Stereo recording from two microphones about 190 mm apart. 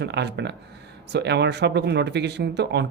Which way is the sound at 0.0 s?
65° right (ahead or behind).